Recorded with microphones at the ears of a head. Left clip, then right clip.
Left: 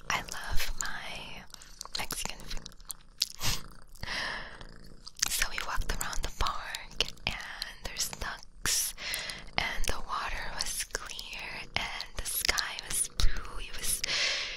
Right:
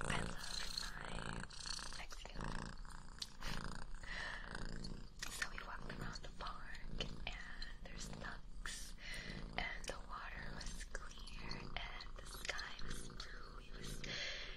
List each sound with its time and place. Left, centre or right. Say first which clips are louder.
0.1 s whispering: left 11 dB; left
1.8 s biting: left 14 dB; left
3.2 s crunch: left 15 dB; left
5.2 s whispering: left 14 dB; left